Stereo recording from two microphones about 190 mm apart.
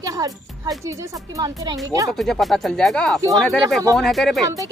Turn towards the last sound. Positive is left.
turn(degrees=0)  # may be behind; listen again after turning